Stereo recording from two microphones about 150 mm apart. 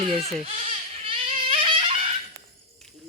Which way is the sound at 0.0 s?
40° right (ahead or behind).